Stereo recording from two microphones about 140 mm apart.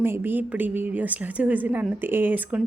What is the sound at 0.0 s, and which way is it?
Speech, 15° right (ahead or behind).